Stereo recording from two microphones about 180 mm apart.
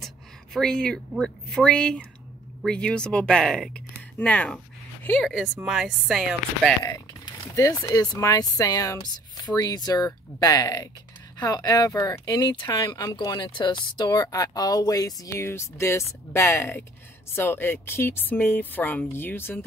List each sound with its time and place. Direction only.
0.0 s a woman's voice: centre (ahead or behind)
6.8 s speech: 20° left (ahead or behind)